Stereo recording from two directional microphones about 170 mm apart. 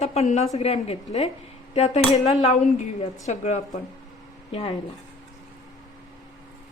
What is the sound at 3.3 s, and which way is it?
A woman's voice, 45° left (ahead or behind).